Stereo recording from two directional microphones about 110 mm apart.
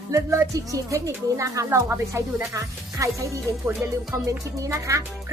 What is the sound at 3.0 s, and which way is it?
Music, 30° right (ahead or behind).